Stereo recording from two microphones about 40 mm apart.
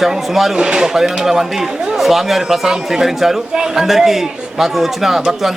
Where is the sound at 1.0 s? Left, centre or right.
Centre.